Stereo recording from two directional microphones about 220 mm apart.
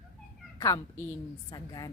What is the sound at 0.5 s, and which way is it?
Speech, 15° left (ahead or behind).